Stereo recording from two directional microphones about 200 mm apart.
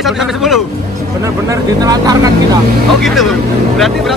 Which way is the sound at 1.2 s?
15° right (ahead or behind).